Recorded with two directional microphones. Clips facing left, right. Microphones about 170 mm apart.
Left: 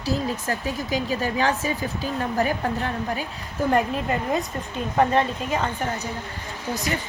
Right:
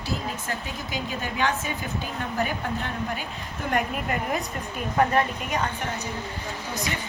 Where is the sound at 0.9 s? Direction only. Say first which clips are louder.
Left 6 dB; 35° left (ahead or behind).